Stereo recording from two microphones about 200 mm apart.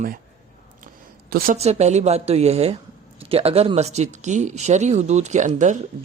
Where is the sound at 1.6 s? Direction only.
35° right (ahead or behind).